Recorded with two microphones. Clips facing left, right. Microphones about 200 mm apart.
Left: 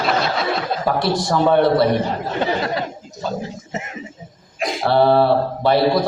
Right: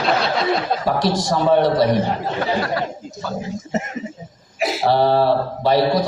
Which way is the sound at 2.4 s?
20° left (ahead or behind).